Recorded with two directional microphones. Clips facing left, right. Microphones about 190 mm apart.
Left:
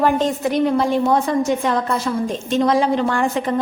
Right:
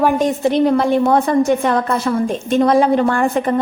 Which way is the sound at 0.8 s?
60° right (ahead or behind).